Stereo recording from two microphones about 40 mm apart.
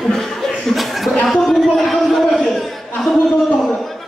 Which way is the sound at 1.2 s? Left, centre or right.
Centre.